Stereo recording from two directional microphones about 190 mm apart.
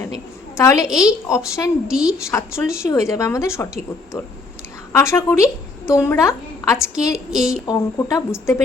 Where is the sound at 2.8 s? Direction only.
15° left (ahead or behind).